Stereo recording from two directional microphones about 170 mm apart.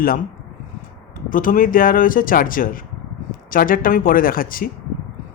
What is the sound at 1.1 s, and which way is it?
Speech, 55° left (ahead or behind).